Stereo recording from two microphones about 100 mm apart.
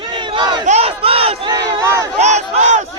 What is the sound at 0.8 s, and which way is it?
Battle cry, 70° right (ahead or behind).